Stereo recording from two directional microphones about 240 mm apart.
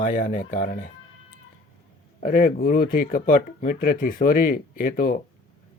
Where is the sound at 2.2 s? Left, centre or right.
Left.